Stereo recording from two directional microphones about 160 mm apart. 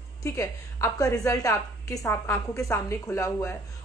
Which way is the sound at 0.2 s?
20° left (ahead or behind).